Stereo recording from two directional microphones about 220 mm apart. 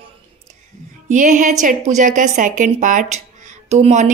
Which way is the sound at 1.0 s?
35° right (ahead or behind).